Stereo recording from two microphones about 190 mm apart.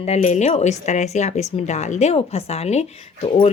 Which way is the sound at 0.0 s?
35° left (ahead or behind).